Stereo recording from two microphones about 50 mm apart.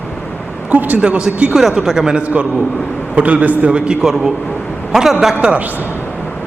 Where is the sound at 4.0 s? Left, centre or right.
Centre.